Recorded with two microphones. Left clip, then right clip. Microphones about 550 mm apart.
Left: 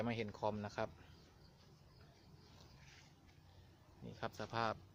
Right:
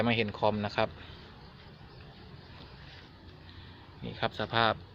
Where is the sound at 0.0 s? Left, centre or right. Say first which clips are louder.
Right 13 dB; right.